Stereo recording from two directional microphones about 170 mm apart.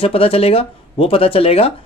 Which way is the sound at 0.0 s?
35° left (ahead or behind).